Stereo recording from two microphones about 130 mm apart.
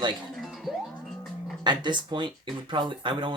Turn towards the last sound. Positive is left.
turn(degrees=-40)  # may be behind; listen again after turning